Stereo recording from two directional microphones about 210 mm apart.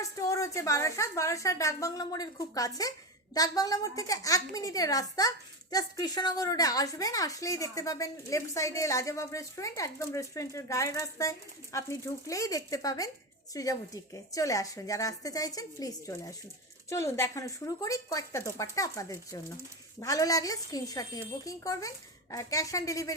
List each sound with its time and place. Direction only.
0.0 s a woman's voice: 15° left (ahead or behind)